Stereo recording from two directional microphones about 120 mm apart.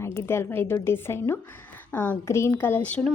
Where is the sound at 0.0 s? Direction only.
20° left (ahead or behind).